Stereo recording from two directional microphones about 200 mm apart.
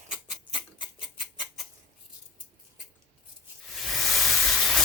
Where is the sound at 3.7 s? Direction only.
Centre (ahead or behind).